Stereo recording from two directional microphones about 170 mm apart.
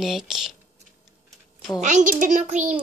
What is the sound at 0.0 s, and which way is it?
Speech, centre (ahead or behind).